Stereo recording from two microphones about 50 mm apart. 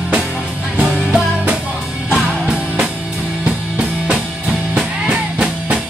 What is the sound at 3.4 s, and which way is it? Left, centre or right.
Music, right.